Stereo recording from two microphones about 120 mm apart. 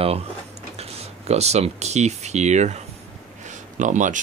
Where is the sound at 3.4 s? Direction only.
90° right.